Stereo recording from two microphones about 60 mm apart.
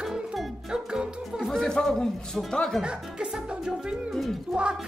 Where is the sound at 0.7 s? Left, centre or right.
Centre.